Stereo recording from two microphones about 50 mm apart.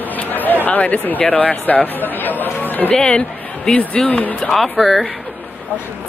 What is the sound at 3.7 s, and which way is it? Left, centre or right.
Speech, left.